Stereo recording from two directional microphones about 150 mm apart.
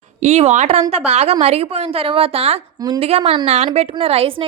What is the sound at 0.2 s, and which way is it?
A woman's voice, 45° right (ahead or behind).